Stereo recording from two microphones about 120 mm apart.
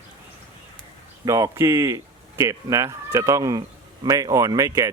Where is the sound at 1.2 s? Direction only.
25° right (ahead or behind).